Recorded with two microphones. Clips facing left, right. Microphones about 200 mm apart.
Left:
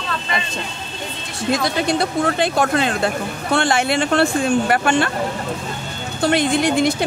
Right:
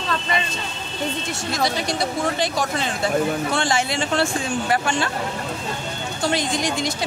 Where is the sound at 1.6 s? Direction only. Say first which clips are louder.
Even; 55° left (ahead or behind).